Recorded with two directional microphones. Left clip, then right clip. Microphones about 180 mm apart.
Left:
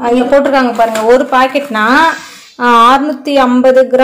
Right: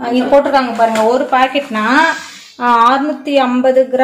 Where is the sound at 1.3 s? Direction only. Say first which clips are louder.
Left 3 dB; 35° left (ahead or behind).